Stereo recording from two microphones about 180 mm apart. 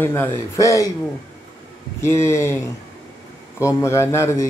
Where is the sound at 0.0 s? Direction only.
10° left (ahead or behind).